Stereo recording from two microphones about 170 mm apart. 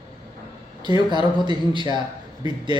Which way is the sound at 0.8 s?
25° right (ahead or behind).